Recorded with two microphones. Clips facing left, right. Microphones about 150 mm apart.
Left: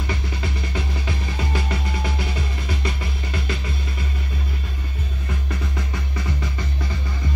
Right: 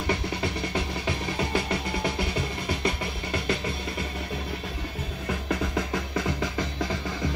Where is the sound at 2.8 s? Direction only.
55° right (ahead or behind).